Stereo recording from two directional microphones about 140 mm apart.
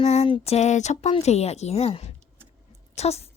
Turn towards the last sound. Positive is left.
turn(degrees=50)  # may be behind; listen again after turning